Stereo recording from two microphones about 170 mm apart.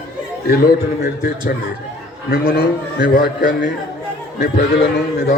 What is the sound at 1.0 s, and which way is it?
Speech, 60° left (ahead or behind).